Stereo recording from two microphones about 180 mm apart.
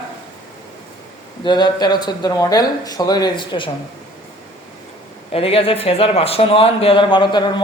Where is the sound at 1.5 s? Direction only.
25° left (ahead or behind).